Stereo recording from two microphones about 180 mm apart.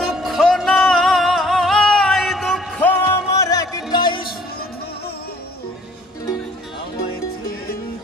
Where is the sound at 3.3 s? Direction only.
20° left (ahead or behind).